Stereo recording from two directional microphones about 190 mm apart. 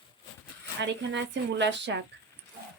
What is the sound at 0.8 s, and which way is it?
Speech, 65° right (ahead or behind).